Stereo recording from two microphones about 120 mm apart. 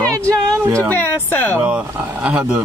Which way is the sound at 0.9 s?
15° left (ahead or behind).